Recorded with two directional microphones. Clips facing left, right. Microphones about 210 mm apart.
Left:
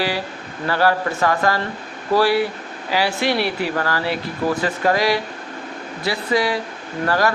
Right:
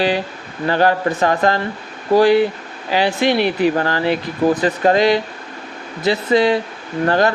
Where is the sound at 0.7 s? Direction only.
20° right (ahead or behind).